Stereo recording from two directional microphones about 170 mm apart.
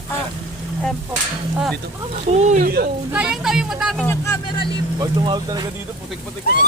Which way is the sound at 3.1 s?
5° right (ahead or behind).